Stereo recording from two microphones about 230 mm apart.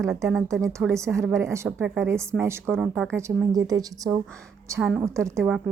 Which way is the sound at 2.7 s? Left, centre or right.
Centre.